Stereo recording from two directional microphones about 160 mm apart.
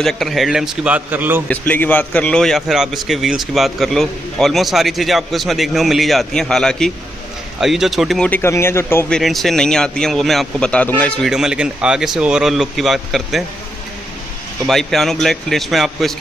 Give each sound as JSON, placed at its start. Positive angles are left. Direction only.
{"t": 0.0, "sound": "a man's voice", "side_deg": 0}
{"t": 1.5, "sound": "a man's voice", "side_deg": 10}
{"t": 8.3, "sound": "speech", "side_deg": 15}
{"t": 9.1, "sound": "a man's voice", "side_deg": 0}
{"t": 11.2, "sound": "a man's voice", "side_deg": -5}
{"t": 14.7, "sound": "a man's voice", "side_deg": 0}